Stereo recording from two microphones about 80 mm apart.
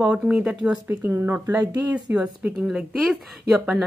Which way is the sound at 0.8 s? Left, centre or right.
Right.